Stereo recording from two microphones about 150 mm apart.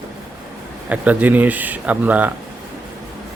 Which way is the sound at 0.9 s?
10° right (ahead or behind).